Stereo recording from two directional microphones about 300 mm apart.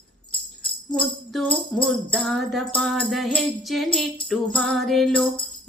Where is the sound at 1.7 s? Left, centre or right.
Centre.